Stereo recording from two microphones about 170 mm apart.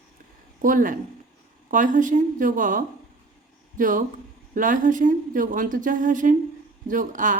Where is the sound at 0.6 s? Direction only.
50° right (ahead or behind).